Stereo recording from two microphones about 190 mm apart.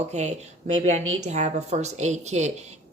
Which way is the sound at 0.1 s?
35° right (ahead or behind).